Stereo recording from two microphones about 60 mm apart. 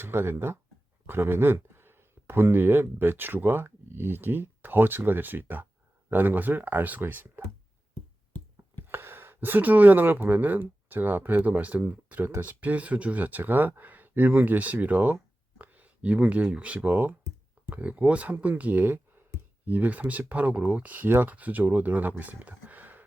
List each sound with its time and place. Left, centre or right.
0.0 s speech: right
8.9 s speech: right